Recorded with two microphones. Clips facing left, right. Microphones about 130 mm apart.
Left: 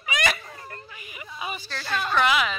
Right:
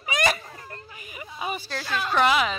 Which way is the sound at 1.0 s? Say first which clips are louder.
Right 3 dB; 40° right (ahead or behind).